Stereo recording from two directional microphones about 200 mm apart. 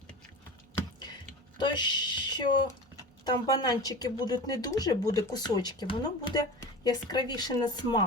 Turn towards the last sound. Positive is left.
turn(degrees=20)  # may be behind; listen again after turning